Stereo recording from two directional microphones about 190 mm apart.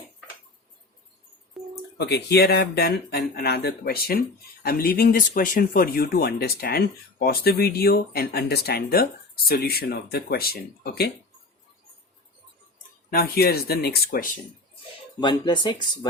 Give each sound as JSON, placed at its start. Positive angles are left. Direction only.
{"t": 1.6, "sound": "a sound", "side_deg": 0}
{"t": 2.0, "sound": "speech", "side_deg": 60}
{"t": 13.1, "sound": "speech", "side_deg": 50}
{"t": 15.2, "sound": "speech", "side_deg": 25}